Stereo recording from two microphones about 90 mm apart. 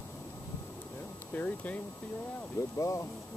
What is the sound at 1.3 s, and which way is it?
Speech, 20° left (ahead or behind).